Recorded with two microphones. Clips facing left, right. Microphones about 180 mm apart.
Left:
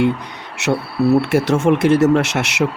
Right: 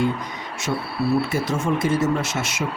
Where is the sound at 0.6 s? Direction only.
75° left (ahead or behind).